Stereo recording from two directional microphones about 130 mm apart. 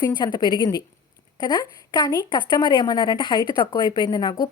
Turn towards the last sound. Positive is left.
turn(degrees=35)  # may be behind; listen again after turning